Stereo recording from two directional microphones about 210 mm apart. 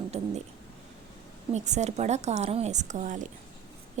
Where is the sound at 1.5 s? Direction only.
35° right (ahead or behind).